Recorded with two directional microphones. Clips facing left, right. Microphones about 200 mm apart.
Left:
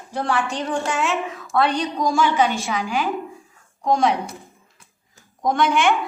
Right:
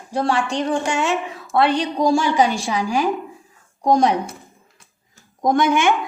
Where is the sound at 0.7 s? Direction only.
25° right (ahead or behind).